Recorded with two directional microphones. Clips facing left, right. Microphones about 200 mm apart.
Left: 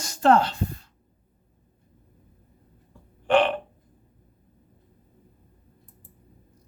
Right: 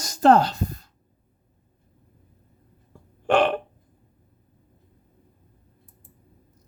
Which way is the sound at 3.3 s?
45° right (ahead or behind).